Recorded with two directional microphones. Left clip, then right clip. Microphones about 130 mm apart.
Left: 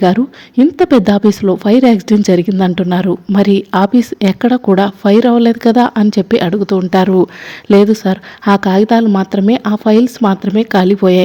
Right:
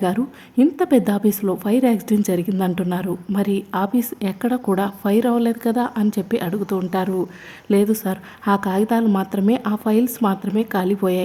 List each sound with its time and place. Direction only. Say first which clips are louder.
0.0 s speech: left 10 dB; 35° left (ahead or behind)
7.9 s a woman's voice: left 9 dB; 30° left (ahead or behind)